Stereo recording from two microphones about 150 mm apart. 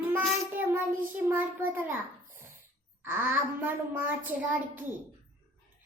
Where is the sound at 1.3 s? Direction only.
15° right (ahead or behind).